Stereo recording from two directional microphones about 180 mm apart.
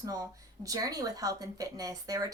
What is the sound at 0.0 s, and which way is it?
A woman's voice, 20° right (ahead or behind).